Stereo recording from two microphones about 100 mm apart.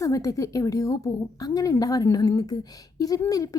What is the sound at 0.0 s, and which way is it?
A woman's voice, 30° left (ahead or behind).